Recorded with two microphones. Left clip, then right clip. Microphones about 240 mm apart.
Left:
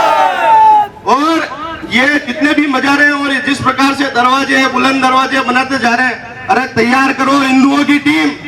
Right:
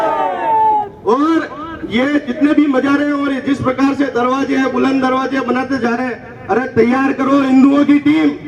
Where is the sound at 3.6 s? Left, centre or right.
Left.